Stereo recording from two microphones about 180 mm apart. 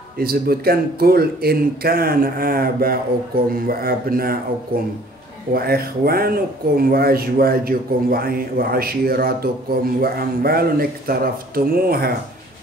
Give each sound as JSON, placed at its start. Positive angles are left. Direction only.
{"t": 0.2, "sound": "speech", "side_deg": -55}
{"t": 5.5, "sound": "speech", "side_deg": -60}